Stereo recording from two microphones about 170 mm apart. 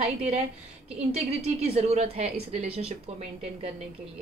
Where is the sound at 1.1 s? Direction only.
40° right (ahead or behind).